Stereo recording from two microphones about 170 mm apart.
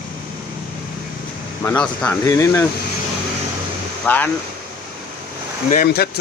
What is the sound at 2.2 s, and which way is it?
Speech, 20° left (ahead or behind).